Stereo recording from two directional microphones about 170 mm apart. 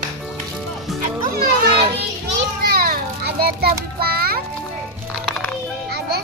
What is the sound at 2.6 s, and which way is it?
Children playing, 60° right (ahead or behind).